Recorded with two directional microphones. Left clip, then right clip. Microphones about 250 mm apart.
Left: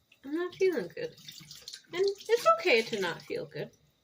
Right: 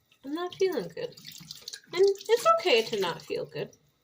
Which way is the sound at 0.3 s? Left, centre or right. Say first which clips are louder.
Even; centre.